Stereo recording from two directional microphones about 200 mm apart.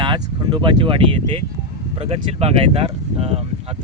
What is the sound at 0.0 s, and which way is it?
Speech, 25° right (ahead or behind).